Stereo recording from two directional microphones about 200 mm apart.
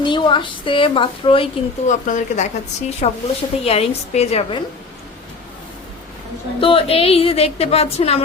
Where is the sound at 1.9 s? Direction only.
35° left (ahead or behind).